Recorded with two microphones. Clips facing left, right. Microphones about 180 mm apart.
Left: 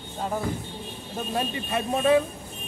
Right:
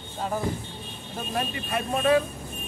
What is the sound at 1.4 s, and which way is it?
Speech, 25° left (ahead or behind).